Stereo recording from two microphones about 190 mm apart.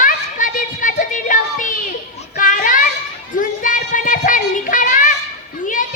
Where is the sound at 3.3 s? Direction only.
45° left (ahead or behind).